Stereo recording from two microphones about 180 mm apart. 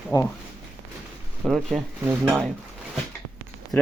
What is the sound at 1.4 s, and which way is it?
A woman's voice, centre (ahead or behind).